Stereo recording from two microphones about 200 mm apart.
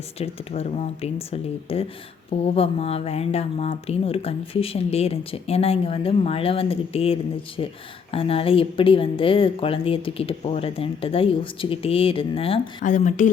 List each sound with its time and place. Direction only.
0.2 s speech: 30° left (ahead or behind)